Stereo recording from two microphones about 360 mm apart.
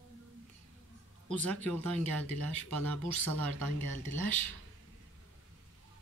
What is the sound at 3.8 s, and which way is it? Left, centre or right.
Speech, right.